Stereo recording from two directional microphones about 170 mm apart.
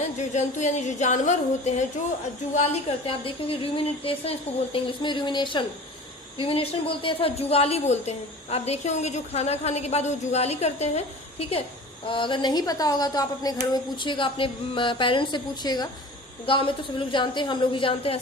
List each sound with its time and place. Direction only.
0.3 s a woman's voice: 45° left (ahead or behind)
3.1 s a woman's voice: 35° left (ahead or behind)